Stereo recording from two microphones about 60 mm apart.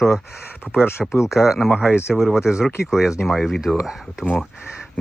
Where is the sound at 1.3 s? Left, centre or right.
Centre.